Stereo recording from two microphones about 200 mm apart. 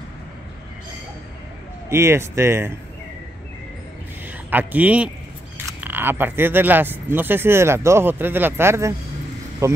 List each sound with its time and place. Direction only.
1.9 s speech: 10° right (ahead or behind)
4.5 s speech: 10° right (ahead or behind)